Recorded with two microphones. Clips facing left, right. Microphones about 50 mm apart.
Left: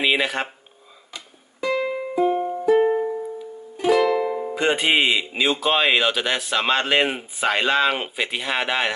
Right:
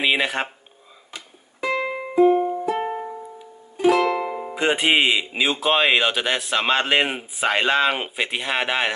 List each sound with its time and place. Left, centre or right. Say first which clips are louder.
0.0 s a sound: even; centre
1.1 s music: even; right
2.7 s music: left 8 dB; centre
3.7 s music: right 1 dB; right
4.1 s music: left 3 dB; centre
4.6 s speech: right 1 dB; centre